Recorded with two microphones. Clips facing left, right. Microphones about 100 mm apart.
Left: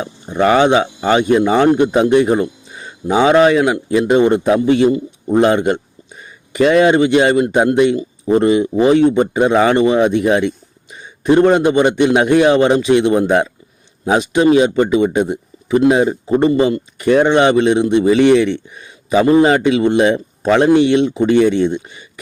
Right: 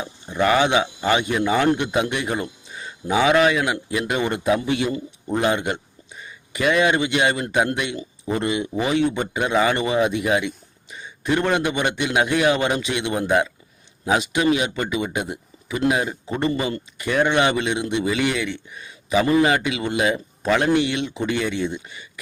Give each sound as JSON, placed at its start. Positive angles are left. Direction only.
{"t": 0.3, "sound": "a man's voice", "side_deg": 30}
{"t": 8.2, "sound": "speech", "side_deg": 20}
{"t": 8.4, "sound": "a man's voice", "side_deg": 35}
{"t": 9.1, "sound": "a man's voice", "side_deg": 30}